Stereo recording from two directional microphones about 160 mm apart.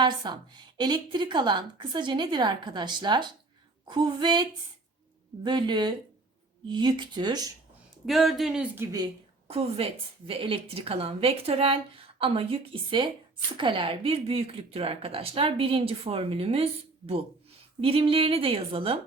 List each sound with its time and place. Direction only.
0.0 s a woman's voice: 25° right (ahead or behind)
8.0 s speech: centre (ahead or behind)
9.5 s speech: 40° right (ahead or behind)
17.7 s speech: 35° right (ahead or behind)